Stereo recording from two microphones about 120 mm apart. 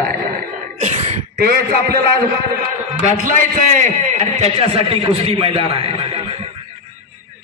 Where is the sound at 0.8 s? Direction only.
75° right (ahead or behind).